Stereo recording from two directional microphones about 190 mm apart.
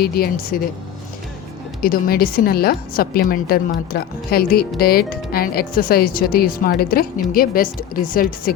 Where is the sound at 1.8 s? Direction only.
50° left (ahead or behind).